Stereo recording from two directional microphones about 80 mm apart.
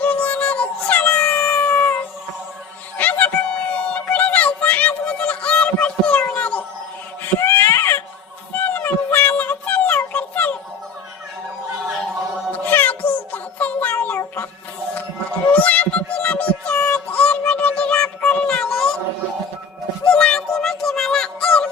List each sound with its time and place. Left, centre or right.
0.0 s music: centre
3.5 s a sound: centre
7.2 s baby cry: left
8.5 s music: left
12.5 s music: left
15.5 s music: centre
17.1 s a sound: centre
20.1 s music: centre